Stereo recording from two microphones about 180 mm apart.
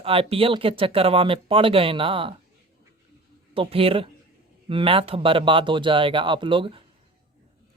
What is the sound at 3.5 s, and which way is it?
Speech, 30° right (ahead or behind).